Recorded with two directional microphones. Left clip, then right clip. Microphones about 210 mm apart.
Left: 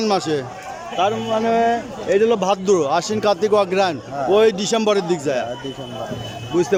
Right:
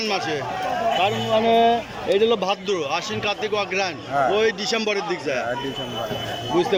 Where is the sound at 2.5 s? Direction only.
25° left (ahead or behind).